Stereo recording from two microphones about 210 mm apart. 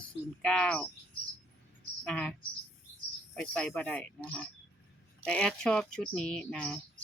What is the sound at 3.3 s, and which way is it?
Speech, 5° left (ahead or behind).